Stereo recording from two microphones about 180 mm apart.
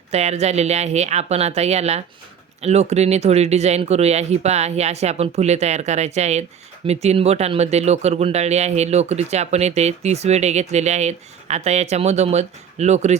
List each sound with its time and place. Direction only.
0.1 s speech: 35° right (ahead or behind)